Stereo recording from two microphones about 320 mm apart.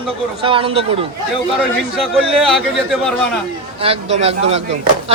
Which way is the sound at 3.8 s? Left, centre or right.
Centre.